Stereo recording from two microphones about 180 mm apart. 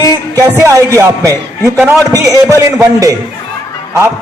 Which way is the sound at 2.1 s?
20° right (ahead or behind).